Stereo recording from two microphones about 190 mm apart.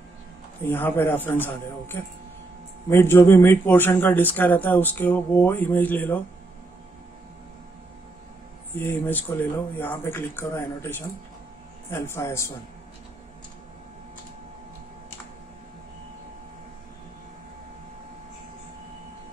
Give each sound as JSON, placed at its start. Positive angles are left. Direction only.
{"t": 0.7, "sound": "speech", "side_deg": 10}
{"t": 8.7, "sound": "speech", "side_deg": 10}